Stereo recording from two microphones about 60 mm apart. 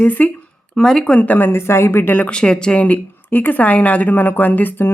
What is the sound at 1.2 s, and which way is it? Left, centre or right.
Speech, left.